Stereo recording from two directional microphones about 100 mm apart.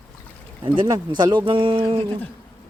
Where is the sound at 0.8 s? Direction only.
45° right (ahead or behind); by 2.0 s 65° right (ahead or behind).